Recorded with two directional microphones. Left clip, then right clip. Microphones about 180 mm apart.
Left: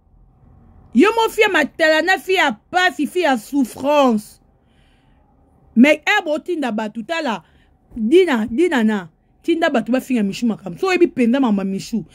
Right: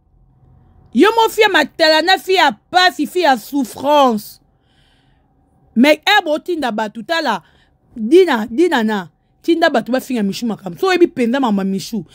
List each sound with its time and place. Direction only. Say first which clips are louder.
0.8 s speech: right 3 dB; 35° right (ahead or behind)
5.7 s speech: right 2 dB; 35° right (ahead or behind)